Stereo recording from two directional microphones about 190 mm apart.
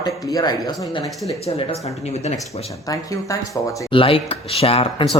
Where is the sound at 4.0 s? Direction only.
30° left (ahead or behind).